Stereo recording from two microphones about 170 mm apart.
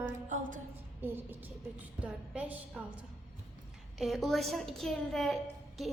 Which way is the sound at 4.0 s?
Centre (ahead or behind).